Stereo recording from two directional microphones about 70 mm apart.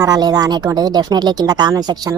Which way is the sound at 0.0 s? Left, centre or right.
Right.